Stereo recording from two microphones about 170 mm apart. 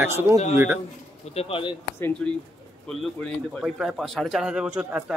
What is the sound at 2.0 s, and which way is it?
Speech, 15° left (ahead or behind).